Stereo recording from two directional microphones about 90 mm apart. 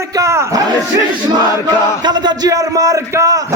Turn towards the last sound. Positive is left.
turn(degrees=-40)  # may be behind; listen again after turning